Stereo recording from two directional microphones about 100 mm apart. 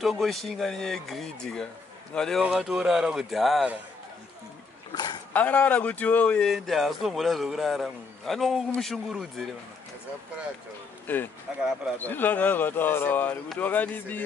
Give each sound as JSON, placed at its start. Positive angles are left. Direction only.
{"t": 0.0, "sound": "a man's voice", "side_deg": 0}
{"t": 2.4, "sound": "a man's voice", "side_deg": -10}
{"t": 4.9, "sound": "speech", "side_deg": 45}
{"t": 5.3, "sound": "speech", "side_deg": 15}
{"t": 6.5, "sound": "a man's voice", "side_deg": 0}
{"t": 11.0, "sound": "speech", "side_deg": 20}